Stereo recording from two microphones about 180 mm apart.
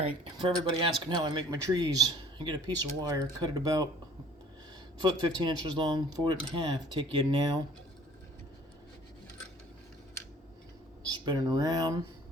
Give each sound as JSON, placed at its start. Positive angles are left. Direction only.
{"t": 0.0, "sound": "speech", "side_deg": -25}
{"t": 4.9, "sound": "speech", "side_deg": -25}
{"t": 11.1, "sound": "speech", "side_deg": -20}